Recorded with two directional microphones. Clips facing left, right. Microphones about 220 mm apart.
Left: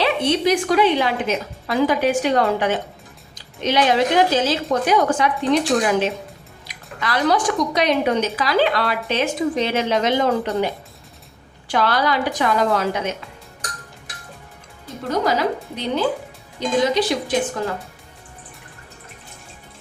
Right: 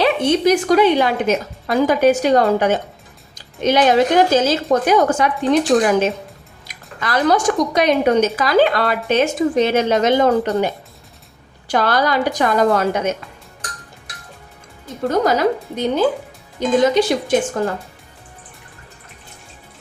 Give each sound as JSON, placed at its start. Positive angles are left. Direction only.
{"t": 0.0, "sound": "speech", "side_deg": -45}
{"t": 11.7, "sound": "speech", "side_deg": -45}
{"t": 15.7, "sound": "speech", "side_deg": -45}